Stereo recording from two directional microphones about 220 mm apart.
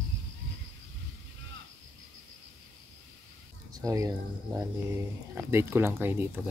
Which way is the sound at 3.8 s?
15° right (ahead or behind).